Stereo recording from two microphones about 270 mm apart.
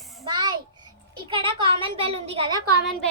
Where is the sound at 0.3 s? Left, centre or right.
Centre.